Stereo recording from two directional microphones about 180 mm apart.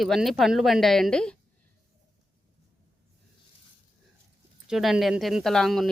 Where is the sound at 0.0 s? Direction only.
Centre (ahead or behind).